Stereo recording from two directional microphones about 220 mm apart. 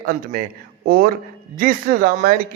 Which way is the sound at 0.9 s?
45° right (ahead or behind).